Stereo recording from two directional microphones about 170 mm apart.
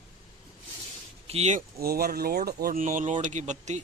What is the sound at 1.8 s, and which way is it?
Speech, 65° right (ahead or behind).